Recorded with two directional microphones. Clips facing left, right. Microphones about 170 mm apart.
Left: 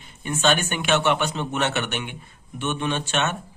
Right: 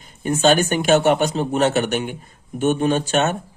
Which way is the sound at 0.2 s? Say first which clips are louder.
Right 6 dB; 40° right (ahead or behind).